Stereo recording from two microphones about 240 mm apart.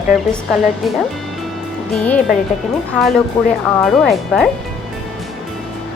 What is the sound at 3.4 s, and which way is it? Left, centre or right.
Speech, centre.